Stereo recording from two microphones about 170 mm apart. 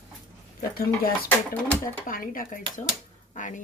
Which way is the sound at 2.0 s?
55° left (ahead or behind).